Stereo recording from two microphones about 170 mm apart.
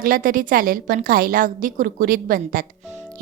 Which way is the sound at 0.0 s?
55° right (ahead or behind).